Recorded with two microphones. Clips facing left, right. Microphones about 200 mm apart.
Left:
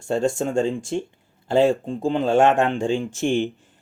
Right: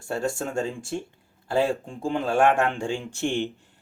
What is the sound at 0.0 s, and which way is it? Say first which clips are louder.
Speech: left 6 dB; 25° left (ahead or behind).